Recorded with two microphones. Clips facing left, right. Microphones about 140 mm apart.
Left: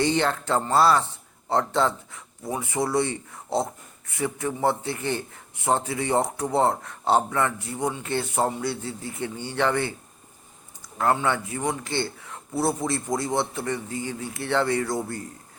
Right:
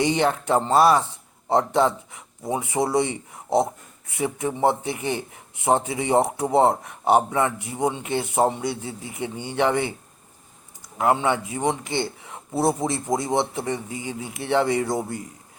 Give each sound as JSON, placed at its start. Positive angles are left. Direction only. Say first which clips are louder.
{"t": 0.0, "sound": "a man's voice", "louder": "right 2 dB", "side_deg": -15}
{"t": 10.9, "sound": "a man's voice", "louder": "right 2 dB", "side_deg": -15}